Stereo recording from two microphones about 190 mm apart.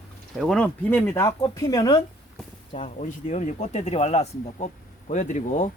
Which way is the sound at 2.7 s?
35° left (ahead or behind).